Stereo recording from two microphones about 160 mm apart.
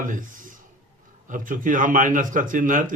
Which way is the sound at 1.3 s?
55° right (ahead or behind).